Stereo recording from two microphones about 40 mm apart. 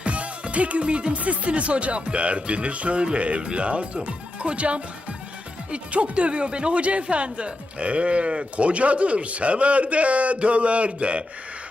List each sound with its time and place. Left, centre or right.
0.0 s speech: right